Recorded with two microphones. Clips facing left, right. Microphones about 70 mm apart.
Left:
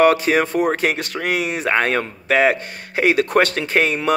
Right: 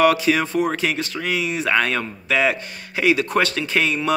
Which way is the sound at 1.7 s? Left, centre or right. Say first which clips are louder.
Left 2 dB; left.